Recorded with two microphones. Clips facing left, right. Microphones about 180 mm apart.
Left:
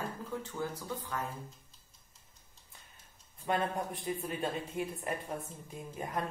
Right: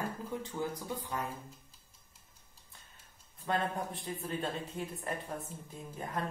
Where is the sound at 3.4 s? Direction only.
15° left (ahead or behind).